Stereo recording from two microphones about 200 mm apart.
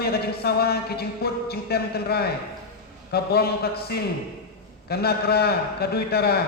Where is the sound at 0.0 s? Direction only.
50° left (ahead or behind).